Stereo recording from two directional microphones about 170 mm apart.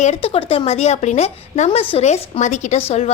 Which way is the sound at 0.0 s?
35° left (ahead or behind).